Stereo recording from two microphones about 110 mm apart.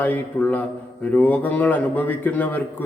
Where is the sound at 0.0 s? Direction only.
15° left (ahead or behind).